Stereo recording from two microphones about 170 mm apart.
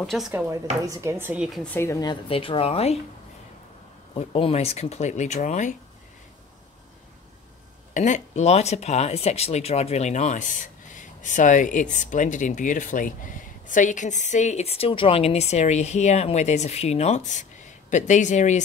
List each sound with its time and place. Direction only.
0.0 s speech: centre (ahead or behind)
0.3 s speech: 15° right (ahead or behind)
1.6 s a woman's voice: 15° left (ahead or behind); by 3.0 s 35° left (ahead or behind)
4.1 s a woman's voice: 35° left (ahead or behind)
7.9 s a woman's voice: 45° left (ahead or behind)